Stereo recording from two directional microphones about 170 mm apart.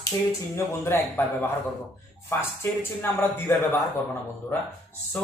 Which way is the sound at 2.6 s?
15° left (ahead or behind).